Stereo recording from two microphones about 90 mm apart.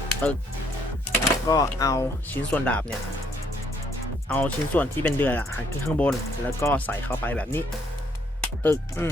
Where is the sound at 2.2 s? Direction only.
20° left (ahead or behind).